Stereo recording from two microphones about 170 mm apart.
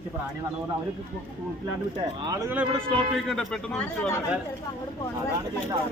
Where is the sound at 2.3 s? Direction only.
20° right (ahead or behind).